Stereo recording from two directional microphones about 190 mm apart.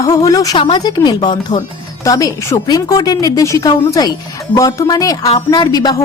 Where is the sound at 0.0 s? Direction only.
20° left (ahead or behind).